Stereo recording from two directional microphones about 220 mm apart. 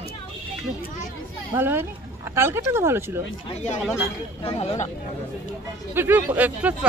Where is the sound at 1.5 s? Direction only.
10° right (ahead or behind).